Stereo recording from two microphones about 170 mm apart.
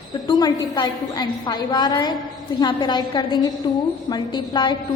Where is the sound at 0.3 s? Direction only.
25° left (ahead or behind).